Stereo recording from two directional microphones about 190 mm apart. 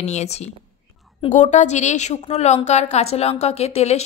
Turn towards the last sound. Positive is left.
turn(degrees=35)  # may be behind; listen again after turning